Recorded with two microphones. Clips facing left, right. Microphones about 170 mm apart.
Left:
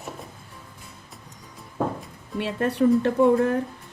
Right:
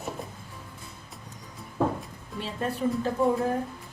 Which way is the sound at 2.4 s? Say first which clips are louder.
Left 7 dB; 70° left (ahead or behind).